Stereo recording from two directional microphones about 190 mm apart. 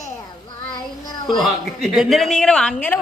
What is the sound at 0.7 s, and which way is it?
Child singing, 20° left (ahead or behind).